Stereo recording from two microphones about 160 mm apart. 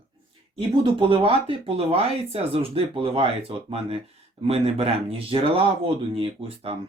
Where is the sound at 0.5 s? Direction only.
30° right (ahead or behind).